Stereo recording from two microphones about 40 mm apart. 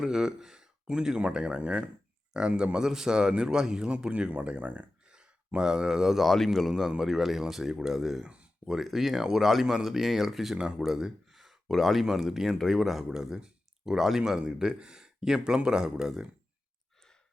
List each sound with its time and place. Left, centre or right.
0.0 s speech: centre
2.7 s a man's voice: centre
4.3 s speech: right
5.0 s a sound: right
5.5 s speech: centre
6.2 s speech: centre
6.7 s speech: centre
8.2 s speech: right
8.6 s speech: centre
10.6 s a man's voice: centre
10.8 s speech: centre
13.1 s speech: centre